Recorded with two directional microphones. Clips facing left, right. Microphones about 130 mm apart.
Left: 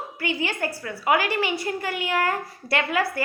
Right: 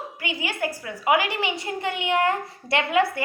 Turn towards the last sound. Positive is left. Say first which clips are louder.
# right 3 dB
turn(degrees=-20)  # may be behind; listen again after turning